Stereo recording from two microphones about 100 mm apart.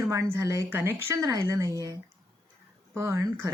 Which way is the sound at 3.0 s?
30° right (ahead or behind).